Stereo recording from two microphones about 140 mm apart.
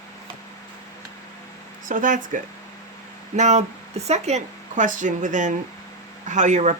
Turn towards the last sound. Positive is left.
turn(degrees=-60)  # may be behind; listen again after turning